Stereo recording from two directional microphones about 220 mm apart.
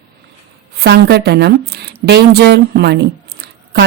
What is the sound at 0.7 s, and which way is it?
A woman's voice, 45° right (ahead or behind).